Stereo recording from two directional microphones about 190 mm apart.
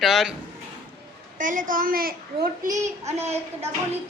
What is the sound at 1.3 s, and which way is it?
Speech, 45° right (ahead or behind).